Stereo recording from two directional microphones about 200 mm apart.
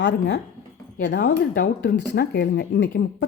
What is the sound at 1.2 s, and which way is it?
Speech, 45° left (ahead or behind).